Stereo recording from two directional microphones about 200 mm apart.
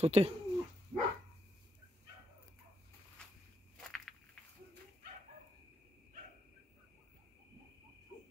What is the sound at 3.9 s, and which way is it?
Walk, centre (ahead or behind).